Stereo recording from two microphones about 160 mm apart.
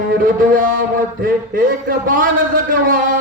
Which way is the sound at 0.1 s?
60° right (ahead or behind).